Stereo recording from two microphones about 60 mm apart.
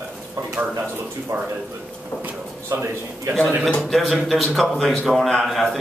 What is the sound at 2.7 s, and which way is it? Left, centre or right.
Speech, right.